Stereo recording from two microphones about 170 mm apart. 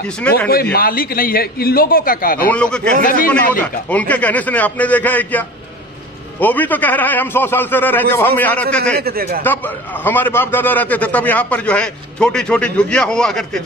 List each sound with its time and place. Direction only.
0.5 s a man's voice: 60° left (ahead or behind)
2.5 s a man's voice: 5° left (ahead or behind)
3.1 s speech: 55° left (ahead or behind)
4.1 s a man's voice: 10° left (ahead or behind)
6.4 s a man's voice: 10° left (ahead or behind)
8.9 s speech: 65° right (ahead or behind)
10.0 s a man's voice: 10° left (ahead or behind)